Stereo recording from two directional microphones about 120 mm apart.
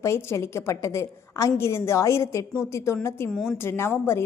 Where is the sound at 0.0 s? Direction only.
20° left (ahead or behind).